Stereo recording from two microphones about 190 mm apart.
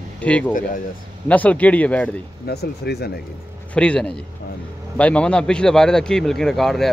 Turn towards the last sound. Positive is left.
turn(degrees=0)  # may be behind; listen again after turning